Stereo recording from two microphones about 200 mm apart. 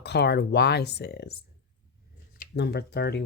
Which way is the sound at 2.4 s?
55° left (ahead or behind).